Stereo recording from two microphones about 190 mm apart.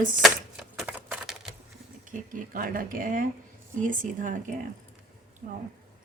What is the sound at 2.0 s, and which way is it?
Speech, 45° right (ahead or behind).